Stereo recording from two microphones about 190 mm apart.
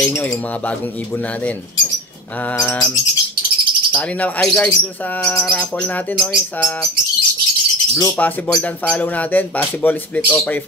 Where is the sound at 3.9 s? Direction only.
5° left (ahead or behind).